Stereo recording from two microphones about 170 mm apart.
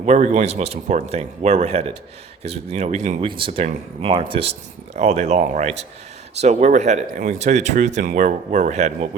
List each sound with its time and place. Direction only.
0.0 s speech: 40° right (ahead or behind)
3.2 s speech: 30° right (ahead or behind)